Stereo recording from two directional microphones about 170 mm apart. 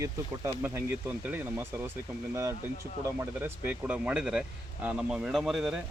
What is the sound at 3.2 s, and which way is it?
Speech, 10° right (ahead or behind).